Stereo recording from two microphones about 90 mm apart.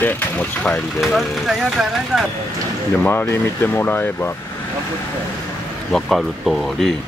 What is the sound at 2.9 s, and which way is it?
Speech, 25° left (ahead or behind).